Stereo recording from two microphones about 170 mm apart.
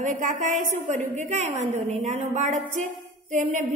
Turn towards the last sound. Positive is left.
turn(degrees=-45)  # may be behind; listen again after turning